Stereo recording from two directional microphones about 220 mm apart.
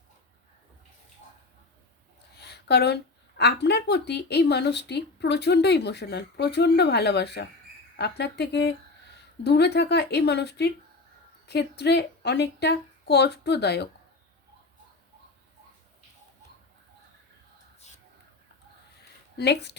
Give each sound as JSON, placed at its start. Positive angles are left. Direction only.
{"t": 2.3, "sound": "a woman's voice", "side_deg": 50}
{"t": 17.7, "sound": "a sound", "side_deg": 30}
{"t": 19.4, "sound": "a woman's voice", "side_deg": 50}